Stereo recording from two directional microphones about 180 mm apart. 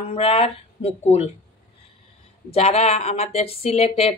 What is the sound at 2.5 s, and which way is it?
Speech, 35° left (ahead or behind).